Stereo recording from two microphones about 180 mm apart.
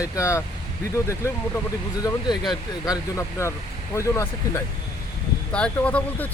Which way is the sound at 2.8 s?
20° left (ahead or behind).